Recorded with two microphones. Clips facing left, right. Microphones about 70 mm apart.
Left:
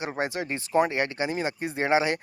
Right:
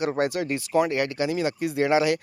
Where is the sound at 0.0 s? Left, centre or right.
Left.